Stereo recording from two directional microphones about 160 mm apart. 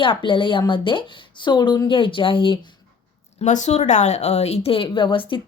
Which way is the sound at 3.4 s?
50° left (ahead or behind).